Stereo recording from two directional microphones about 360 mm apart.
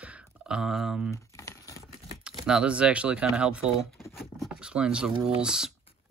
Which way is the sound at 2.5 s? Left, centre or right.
Centre.